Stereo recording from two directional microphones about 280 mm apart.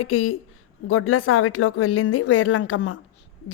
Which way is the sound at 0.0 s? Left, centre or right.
Left.